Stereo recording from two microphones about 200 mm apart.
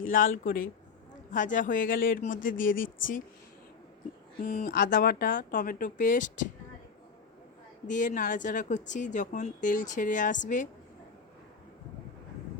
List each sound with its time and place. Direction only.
0.0 s a woman's voice: 45° left (ahead or behind)
2.7 s speech: 70° left (ahead or behind)
4.4 s speech: 45° left (ahead or behind)
7.9 s a woman's voice: 40° left (ahead or behind)